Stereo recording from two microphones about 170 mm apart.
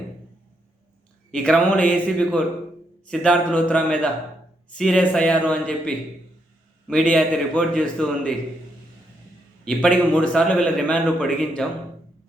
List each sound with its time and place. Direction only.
1.3 s a man's voice: 5° left (ahead or behind)
9.6 s a man's voice: 5° left (ahead or behind)